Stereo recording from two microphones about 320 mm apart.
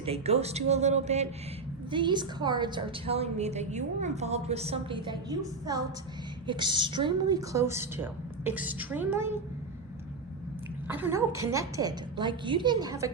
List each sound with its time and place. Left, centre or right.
0.0 s a woman's voice: centre
10.8 s a woman's voice: centre